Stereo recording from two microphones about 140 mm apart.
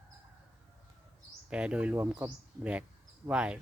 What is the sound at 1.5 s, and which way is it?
Speech, 10° right (ahead or behind).